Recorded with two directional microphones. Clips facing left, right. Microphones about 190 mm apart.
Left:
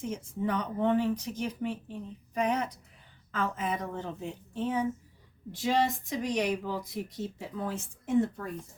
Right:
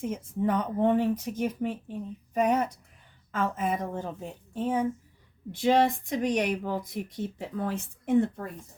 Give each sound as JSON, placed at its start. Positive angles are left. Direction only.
{"t": 0.0, "sound": "speech", "side_deg": -50}